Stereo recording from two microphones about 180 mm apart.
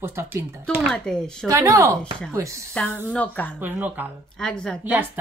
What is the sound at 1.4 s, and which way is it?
Speech, 15° right (ahead or behind).